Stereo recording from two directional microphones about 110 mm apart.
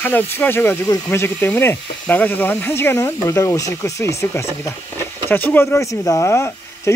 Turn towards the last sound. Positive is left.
turn(degrees=25)  # may be behind; listen again after turning